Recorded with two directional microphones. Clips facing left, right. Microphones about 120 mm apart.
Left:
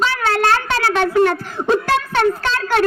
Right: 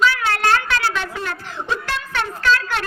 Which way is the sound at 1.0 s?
60° left (ahead or behind).